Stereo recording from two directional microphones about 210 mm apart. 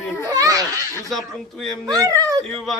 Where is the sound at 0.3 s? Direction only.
15° right (ahead or behind).